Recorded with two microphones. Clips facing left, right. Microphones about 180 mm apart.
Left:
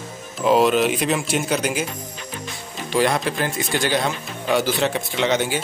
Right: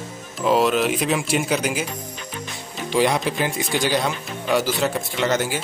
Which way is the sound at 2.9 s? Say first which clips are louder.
Even; 10° right (ahead or behind).